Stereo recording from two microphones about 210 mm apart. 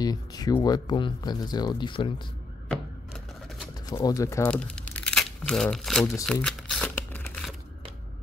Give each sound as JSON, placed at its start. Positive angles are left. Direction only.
{"t": 0.0, "sound": "speech", "side_deg": 20}
{"t": 2.7, "sound": "typewriter", "side_deg": -5}
{"t": 3.8, "sound": "speech", "side_deg": 20}
{"t": 6.4, "sound": "a sound", "side_deg": 5}